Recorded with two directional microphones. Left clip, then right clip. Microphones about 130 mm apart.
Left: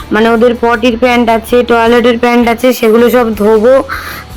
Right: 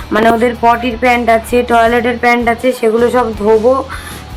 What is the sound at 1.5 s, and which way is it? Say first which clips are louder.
A man's voice: left 6 dB; 25° left (ahead or behind).